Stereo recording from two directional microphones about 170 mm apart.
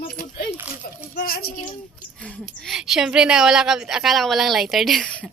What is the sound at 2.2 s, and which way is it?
A woman's voice, centre (ahead or behind).